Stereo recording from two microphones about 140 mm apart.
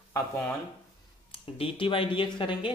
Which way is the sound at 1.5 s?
40° left (ahead or behind).